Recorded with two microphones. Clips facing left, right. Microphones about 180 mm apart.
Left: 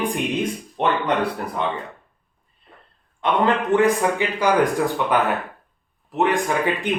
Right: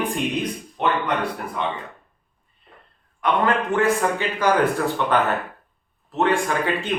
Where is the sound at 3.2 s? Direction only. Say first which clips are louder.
Left 1 dB; 25° left (ahead or behind).